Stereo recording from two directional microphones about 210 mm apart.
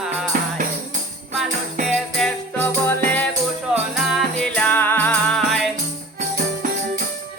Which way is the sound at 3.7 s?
Centre (ahead or behind).